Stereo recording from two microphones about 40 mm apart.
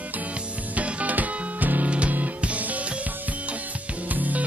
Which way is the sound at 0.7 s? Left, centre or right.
Right.